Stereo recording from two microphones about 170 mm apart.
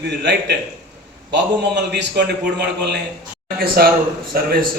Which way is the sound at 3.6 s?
60° right (ahead or behind).